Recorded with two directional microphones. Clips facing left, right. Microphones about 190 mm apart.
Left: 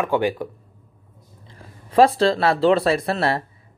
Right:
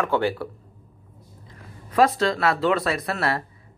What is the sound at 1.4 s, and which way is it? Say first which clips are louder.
Speech: left 1 dB; 30° left (ahead or behind).